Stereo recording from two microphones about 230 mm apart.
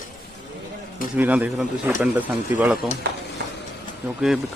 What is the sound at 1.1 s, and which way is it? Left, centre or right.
Speech, centre.